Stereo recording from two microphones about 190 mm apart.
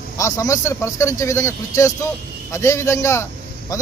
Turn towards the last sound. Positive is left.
turn(degrees=15)  # may be behind; listen again after turning